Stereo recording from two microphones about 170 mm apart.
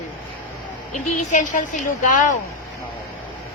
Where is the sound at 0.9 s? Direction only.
45° left (ahead or behind).